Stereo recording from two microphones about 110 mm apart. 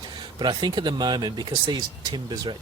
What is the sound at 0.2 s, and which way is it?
Speech, 40° right (ahead or behind).